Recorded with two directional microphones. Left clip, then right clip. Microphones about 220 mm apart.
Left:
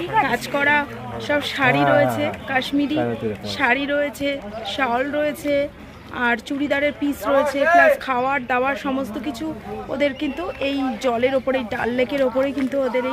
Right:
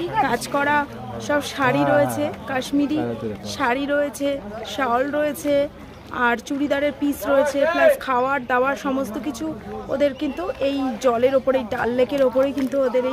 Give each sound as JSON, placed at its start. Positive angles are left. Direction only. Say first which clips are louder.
{"t": 0.2, "sound": "speech", "louder": "even", "side_deg": -10}